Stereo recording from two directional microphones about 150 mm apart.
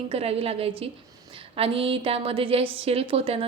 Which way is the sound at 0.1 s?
40° right (ahead or behind).